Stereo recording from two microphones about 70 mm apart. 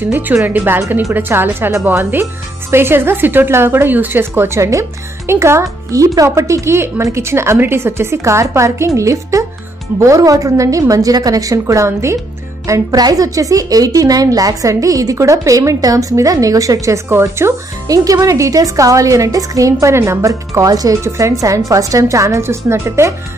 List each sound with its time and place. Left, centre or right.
0.1 s a woman's voice: right
17.8 s a woman's voice: right
21.0 s a woman's voice: right